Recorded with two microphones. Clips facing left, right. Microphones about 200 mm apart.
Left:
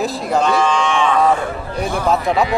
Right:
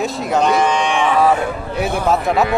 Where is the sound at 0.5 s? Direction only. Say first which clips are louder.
Right 1 dB; 20° right (ahead or behind).